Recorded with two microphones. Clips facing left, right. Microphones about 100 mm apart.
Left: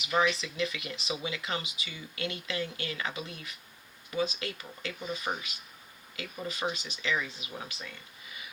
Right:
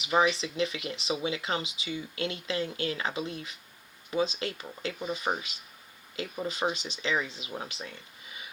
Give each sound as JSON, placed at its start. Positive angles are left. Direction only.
{"t": 0.1, "sound": "speech", "side_deg": -30}